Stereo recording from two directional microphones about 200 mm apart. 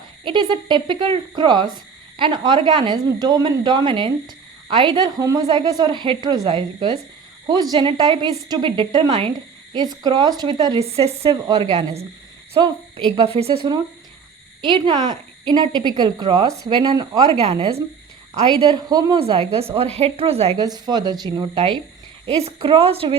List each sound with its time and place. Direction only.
0.3 s speech: 25° right (ahead or behind)
18.7 s speech: 20° right (ahead or behind)
19.2 s a woman's voice: 30° right (ahead or behind)
20.6 s speech: 20° right (ahead or behind)